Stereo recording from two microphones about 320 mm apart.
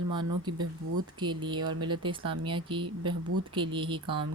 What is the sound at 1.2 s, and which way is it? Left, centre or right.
Speech, centre.